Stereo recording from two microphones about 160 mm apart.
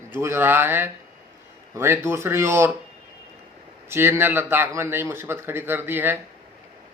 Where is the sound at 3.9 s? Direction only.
15° right (ahead or behind).